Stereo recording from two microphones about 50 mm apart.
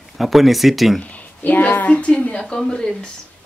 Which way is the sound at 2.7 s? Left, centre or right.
Centre.